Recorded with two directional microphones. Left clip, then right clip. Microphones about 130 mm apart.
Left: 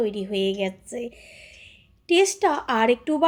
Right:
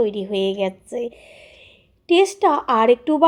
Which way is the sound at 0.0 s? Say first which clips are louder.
Right 4 dB; 35° right (ahead or behind).